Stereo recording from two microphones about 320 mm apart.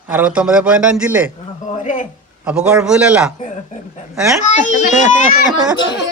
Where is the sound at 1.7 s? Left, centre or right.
Left.